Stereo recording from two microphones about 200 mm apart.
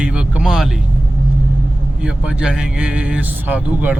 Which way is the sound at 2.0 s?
5° right (ahead or behind).